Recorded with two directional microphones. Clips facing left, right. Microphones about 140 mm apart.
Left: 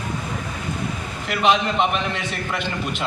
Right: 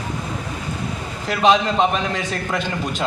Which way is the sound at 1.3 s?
35° right (ahead or behind).